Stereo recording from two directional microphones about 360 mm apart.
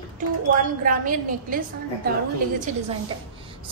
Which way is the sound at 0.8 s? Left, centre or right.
Right.